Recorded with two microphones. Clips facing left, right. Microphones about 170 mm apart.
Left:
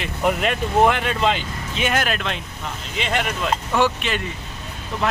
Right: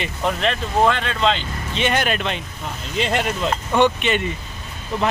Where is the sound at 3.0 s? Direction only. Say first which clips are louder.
Right 3 dB; 35° right (ahead or behind).